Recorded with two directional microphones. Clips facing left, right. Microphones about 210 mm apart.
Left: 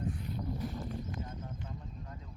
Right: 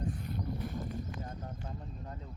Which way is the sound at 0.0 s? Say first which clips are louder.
Even; 45° right (ahead or behind).